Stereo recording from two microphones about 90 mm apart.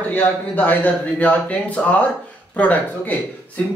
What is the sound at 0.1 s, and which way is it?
Speech, 15° left (ahead or behind).